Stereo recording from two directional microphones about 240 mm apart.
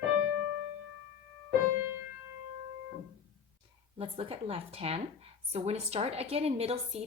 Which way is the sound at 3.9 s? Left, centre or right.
Right.